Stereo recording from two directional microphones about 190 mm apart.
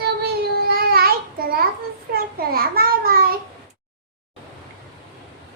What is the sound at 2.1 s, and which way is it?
A child's voice, 55° right (ahead or behind).